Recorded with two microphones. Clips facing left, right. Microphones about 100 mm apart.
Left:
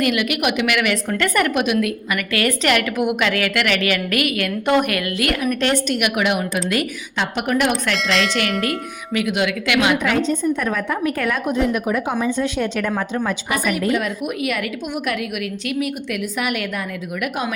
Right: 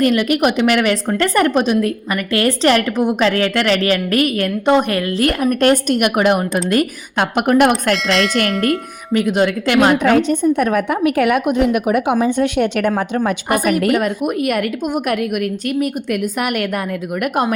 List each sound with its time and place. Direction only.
0.0 s a woman's voice: 35° right (ahead or behind)
8.0 s speech: centre (ahead or behind)
8.4 s a woman's voice: 45° right (ahead or behind)
10.2 s a woman's voice: 65° right (ahead or behind)
13.2 s a woman's voice: 50° right (ahead or behind)